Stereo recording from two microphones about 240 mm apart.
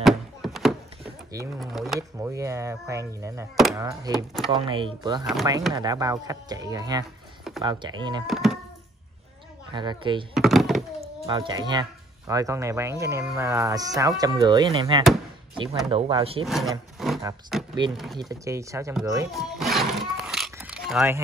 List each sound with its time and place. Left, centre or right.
0.0 s a sound: centre
1.6 s speech: centre
2.0 s speech: centre
5.2 s speech: centre
5.7 s speech: centre
8.3 s speech: centre
9.8 s speech: centre
10.3 s a sound: centre
11.0 s speech: centre
16.4 s speech: centre
17.0 s a sound: centre
17.5 s speech: centre
18.2 s speech: centre
19.3 s music: centre